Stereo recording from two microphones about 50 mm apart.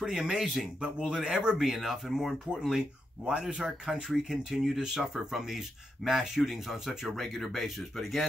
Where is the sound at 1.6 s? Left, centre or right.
Centre.